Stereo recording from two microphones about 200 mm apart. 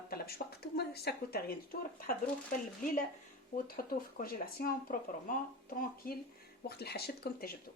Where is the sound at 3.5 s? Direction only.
45° left (ahead or behind).